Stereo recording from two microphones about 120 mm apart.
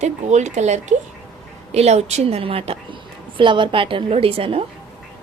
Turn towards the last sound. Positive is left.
turn(degrees=-50)  # may be behind; listen again after turning